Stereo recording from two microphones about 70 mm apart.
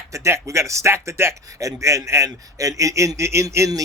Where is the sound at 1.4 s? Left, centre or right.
Right.